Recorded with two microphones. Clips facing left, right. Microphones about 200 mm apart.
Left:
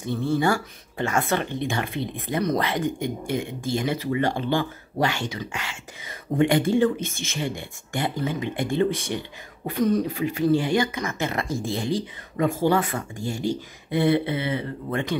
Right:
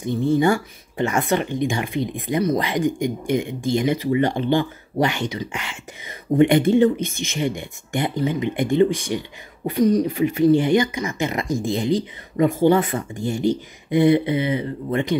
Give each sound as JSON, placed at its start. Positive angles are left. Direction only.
{"t": 0.0, "sound": "speech", "side_deg": -15}
{"t": 10.0, "sound": "speech", "side_deg": -25}